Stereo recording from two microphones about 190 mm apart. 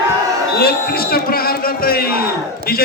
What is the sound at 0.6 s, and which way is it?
A man's voice, 55° left (ahead or behind).